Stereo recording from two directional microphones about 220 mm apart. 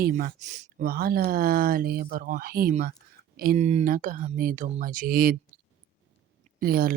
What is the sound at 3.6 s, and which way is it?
Speech, 30° right (ahead or behind).